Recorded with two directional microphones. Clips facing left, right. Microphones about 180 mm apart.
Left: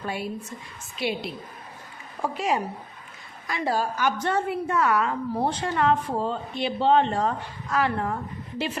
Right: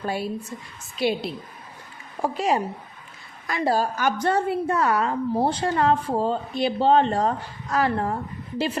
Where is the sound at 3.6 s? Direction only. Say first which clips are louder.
Right 3 dB; 35° right (ahead or behind).